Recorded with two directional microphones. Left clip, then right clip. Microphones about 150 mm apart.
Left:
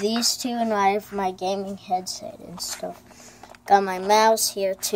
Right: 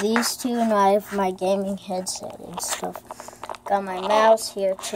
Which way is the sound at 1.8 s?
55° right (ahead or behind).